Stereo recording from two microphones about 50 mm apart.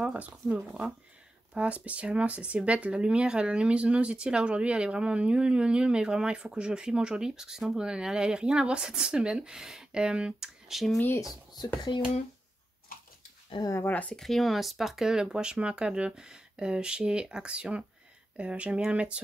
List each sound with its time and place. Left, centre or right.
0.0 s speech: right
10.7 s speech: centre
13.8 s speech: left
14.1 s speech: centre; by 19.1 s right